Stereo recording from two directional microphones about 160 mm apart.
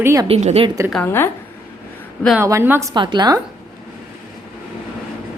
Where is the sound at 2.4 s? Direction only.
15° right (ahead or behind).